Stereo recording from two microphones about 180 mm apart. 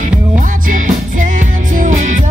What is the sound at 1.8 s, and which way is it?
Music, 45° right (ahead or behind).